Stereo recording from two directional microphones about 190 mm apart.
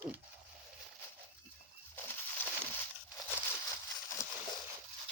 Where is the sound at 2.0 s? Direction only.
10° left (ahead or behind).